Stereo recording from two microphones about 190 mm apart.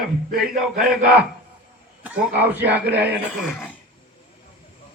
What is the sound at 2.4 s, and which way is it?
Speech, 10° right (ahead or behind).